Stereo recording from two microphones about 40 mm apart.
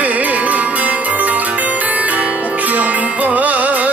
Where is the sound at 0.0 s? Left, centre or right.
Right.